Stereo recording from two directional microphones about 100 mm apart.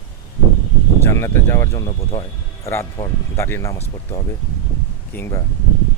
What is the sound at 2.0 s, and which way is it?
Speech, 75° left (ahead or behind).